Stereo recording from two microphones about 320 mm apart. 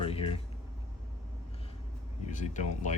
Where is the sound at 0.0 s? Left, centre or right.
Centre.